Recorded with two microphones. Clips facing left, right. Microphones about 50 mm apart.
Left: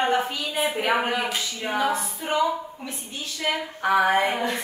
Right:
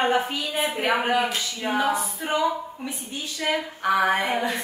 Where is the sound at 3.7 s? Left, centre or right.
Centre.